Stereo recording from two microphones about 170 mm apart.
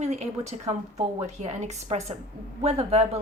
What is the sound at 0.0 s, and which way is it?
A woman's voice, 40° right (ahead or behind).